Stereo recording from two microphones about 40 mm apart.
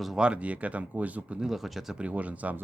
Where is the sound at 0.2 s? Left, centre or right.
Right.